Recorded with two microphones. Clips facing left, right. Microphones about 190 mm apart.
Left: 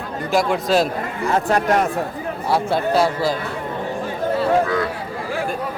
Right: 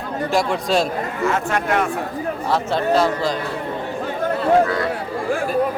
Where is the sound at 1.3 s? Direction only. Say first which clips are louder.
Left 5 dB; 35° left (ahead or behind).